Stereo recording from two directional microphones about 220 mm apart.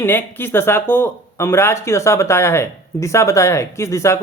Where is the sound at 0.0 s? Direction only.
10° left (ahead or behind).